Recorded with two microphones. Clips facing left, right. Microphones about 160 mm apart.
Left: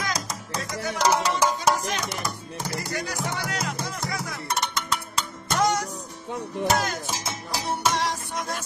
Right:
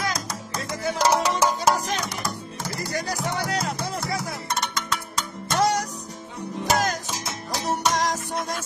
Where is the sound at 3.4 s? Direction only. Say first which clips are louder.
Right 3 dB; 35° right (ahead or behind).